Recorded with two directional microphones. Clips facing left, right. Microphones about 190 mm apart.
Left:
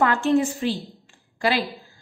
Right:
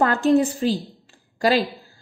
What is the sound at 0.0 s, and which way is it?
A woman's voice, 40° right (ahead or behind).